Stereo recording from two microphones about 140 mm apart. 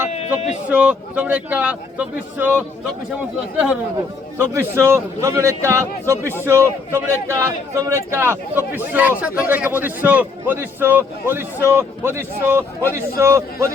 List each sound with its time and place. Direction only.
0.7 s speech: 10° right (ahead or behind)
4.4 s a man's voice: 20° right (ahead or behind)